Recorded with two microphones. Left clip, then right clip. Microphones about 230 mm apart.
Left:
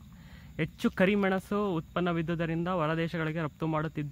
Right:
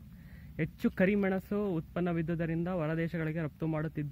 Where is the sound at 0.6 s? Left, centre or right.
Centre.